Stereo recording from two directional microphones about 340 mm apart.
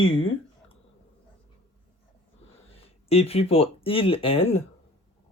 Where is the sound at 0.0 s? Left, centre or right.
Left.